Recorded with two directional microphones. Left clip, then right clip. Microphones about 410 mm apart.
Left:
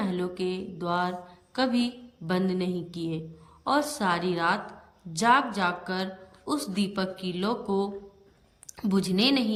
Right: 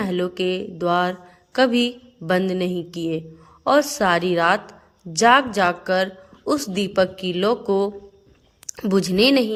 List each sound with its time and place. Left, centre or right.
0.0 s a woman's voice: centre